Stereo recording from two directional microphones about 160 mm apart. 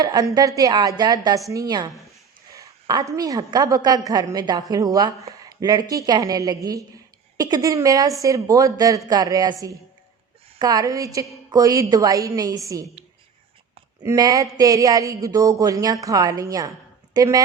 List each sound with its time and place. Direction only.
0.0 s a woman's voice: 25° right (ahead or behind)
14.0 s a woman's voice: 20° right (ahead or behind)